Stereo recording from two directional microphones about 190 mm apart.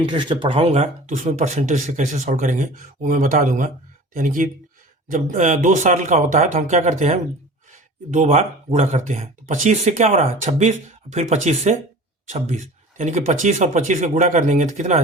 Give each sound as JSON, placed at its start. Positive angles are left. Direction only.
{"t": 0.0, "sound": "speech", "side_deg": -25}